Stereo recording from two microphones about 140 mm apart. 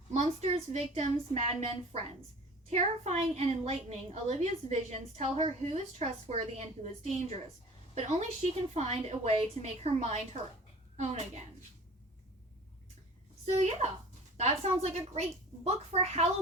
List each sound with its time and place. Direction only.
0.1 s a woman's voice: 50° right (ahead or behind)
14.4 s a woman's voice: 50° right (ahead or behind)